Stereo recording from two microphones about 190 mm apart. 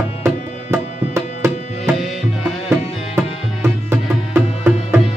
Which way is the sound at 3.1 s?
10° right (ahead or behind).